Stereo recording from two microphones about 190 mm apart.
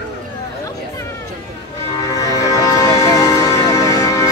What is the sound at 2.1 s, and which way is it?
Music, 20° left (ahead or behind).